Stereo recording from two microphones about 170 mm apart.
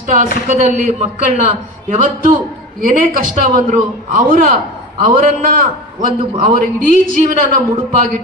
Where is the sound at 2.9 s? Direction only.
55° right (ahead or behind).